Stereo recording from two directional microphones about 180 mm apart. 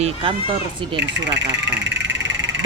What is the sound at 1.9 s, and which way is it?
Frog, 80° right.